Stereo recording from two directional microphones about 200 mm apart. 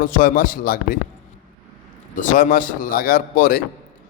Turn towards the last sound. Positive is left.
turn(degrees=45)  # may be behind; listen again after turning